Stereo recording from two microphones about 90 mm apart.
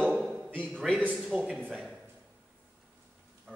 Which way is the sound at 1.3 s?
10° right (ahead or behind).